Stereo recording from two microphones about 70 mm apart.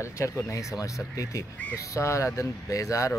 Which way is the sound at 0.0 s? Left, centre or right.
Left.